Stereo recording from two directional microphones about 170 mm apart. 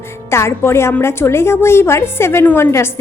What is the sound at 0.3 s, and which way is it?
A woman's voice, 15° left (ahead or behind).